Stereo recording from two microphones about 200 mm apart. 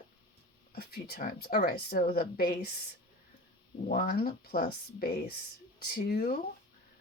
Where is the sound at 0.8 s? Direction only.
50° left (ahead or behind).